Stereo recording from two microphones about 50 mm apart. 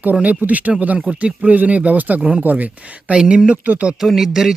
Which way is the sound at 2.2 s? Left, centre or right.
Centre.